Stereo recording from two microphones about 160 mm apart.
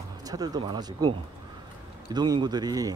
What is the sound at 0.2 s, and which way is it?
A man's voice, 25° right (ahead or behind).